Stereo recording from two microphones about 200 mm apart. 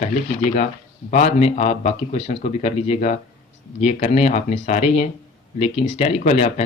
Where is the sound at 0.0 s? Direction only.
40° left (ahead or behind).